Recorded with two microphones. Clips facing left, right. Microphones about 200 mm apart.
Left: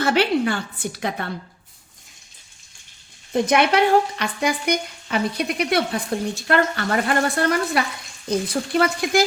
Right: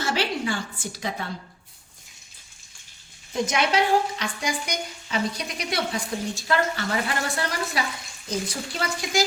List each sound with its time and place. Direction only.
0.0 s speech: 60° left (ahead or behind)
3.3 s speech: 60° left (ahead or behind)